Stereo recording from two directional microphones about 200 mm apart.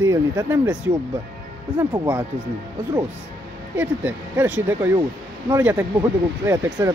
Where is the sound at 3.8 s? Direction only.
10° right (ahead or behind).